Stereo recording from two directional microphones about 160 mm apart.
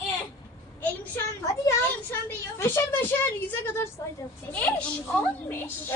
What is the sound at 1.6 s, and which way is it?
A woman's voice, 15° left (ahead or behind).